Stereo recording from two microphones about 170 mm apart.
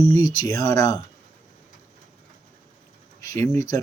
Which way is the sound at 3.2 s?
20° left (ahead or behind).